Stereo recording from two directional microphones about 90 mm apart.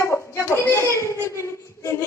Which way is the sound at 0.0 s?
30° left (ahead or behind).